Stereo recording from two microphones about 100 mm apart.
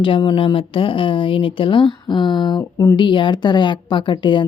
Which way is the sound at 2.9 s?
55° left (ahead or behind).